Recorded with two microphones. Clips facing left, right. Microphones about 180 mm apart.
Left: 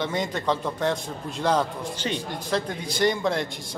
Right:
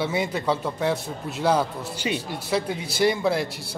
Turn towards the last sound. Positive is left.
turn(degrees=-5)  # may be behind; listen again after turning